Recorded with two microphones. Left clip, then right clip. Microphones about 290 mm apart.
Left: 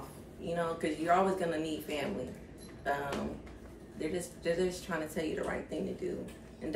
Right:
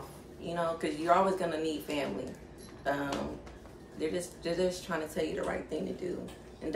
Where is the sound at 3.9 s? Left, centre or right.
Centre.